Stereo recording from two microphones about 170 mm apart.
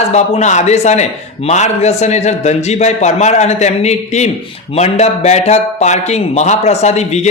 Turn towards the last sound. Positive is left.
turn(degrees=40)  # may be behind; listen again after turning